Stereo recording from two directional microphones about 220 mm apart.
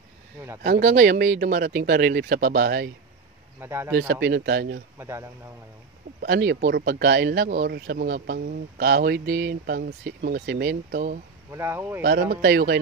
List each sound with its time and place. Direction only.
0.7 s speech: 35° right (ahead or behind)
3.6 s speech: 10° right (ahead or behind)
4.1 s speech: 45° right (ahead or behind)
4.9 s speech: 10° right (ahead or behind)
6.2 s speech: 45° right (ahead or behind)
11.5 s speech: 10° right (ahead or behind)
12.0 s speech: 45° right (ahead or behind)